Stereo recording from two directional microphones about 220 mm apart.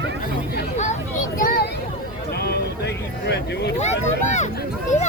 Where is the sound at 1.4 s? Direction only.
40° left (ahead or behind).